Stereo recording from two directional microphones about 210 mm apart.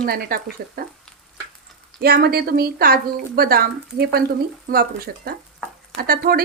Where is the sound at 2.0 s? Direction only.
50° right (ahead or behind).